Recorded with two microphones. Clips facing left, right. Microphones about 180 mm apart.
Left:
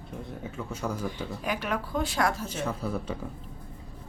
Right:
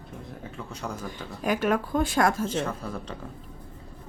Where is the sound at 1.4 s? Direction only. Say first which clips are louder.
Right 8 dB; 45° right (ahead or behind).